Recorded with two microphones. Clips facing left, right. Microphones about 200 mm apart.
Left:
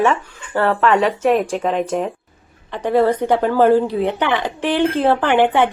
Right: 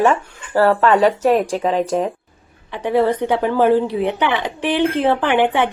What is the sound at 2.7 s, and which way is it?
Speech, 10° right (ahead or behind).